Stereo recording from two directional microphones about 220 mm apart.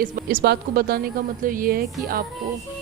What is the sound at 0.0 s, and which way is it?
A woman's voice, 40° right (ahead or behind).